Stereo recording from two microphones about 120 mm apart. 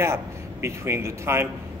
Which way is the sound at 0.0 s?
20° right (ahead or behind).